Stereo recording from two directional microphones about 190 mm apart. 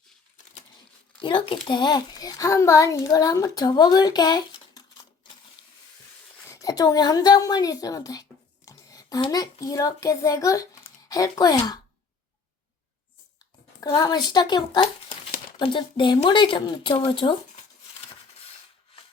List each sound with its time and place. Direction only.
1.5 s a child's voice: 25° left (ahead or behind)
6.5 s a woman's voice: 20° left (ahead or behind)
13.8 s a child's voice: 20° left (ahead or behind)